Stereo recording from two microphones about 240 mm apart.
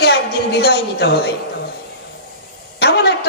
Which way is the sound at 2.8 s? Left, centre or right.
Left.